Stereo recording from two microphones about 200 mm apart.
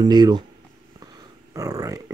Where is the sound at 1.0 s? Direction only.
20° right (ahead or behind).